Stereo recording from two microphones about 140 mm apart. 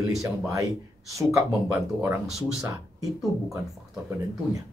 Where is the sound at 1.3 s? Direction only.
15° right (ahead or behind).